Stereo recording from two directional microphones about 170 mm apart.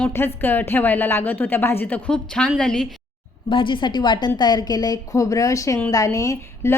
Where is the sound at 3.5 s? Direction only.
30° left (ahead or behind).